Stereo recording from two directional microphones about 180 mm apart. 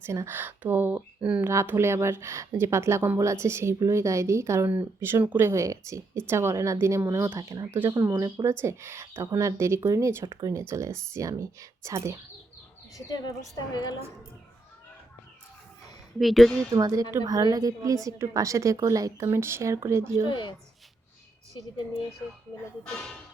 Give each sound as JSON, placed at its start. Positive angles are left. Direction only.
{"t": 0.0, "sound": "a woman's voice", "side_deg": -15}
{"t": 16.1, "sound": "speech", "side_deg": 0}
{"t": 16.7, "sound": "a woman's voice", "side_deg": -20}
{"t": 20.2, "sound": "speech", "side_deg": 25}